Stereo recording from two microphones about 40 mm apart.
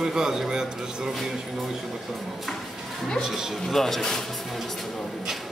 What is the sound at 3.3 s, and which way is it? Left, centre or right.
Speech, centre.